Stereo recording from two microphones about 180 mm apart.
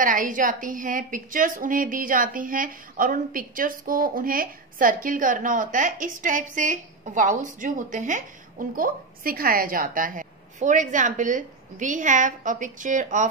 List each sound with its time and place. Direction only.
0.0 s a woman's voice: 50° right (ahead or behind)